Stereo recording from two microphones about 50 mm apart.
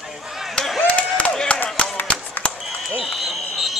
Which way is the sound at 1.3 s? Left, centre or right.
Centre.